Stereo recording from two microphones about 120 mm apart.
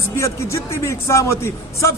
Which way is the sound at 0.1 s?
25° left (ahead or behind).